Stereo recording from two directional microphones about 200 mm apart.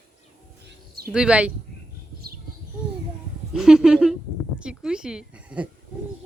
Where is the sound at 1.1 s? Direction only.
5° right (ahead or behind).